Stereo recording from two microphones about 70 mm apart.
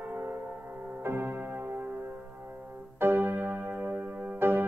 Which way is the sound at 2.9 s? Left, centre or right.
Right.